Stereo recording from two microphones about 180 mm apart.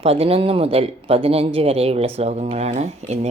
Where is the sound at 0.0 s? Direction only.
35° right (ahead or behind).